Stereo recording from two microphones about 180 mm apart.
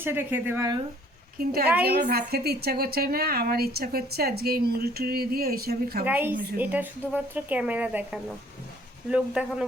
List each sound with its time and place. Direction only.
0.0 s speech: 10° right (ahead or behind)
1.4 s a woman's voice: 55° right (ahead or behind)
6.1 s speech: 10° right (ahead or behind)